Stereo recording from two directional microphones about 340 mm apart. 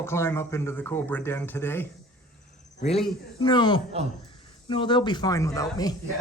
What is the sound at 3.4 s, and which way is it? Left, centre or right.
Speech, centre.